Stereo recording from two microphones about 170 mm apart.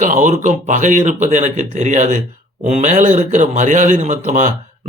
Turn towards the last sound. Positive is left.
turn(degrees=-45)  # may be behind; listen again after turning